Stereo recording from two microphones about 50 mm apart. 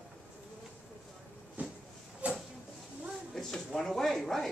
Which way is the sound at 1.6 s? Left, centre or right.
Right.